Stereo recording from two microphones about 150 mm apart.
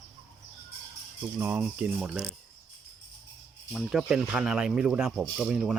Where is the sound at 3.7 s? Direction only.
5° right (ahead or behind).